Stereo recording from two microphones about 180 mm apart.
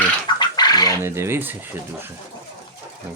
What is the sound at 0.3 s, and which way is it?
Bird, 25° left (ahead or behind).